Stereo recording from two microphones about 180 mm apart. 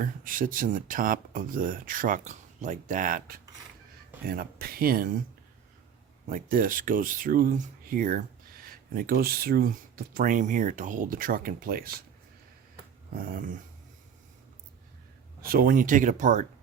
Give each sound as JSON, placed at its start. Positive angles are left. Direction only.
{"t": 0.0, "sound": "speech", "side_deg": -50}
{"t": 6.2, "sound": "speech", "side_deg": -50}
{"t": 13.1, "sound": "speech", "side_deg": -50}
{"t": 15.4, "sound": "speech", "side_deg": -55}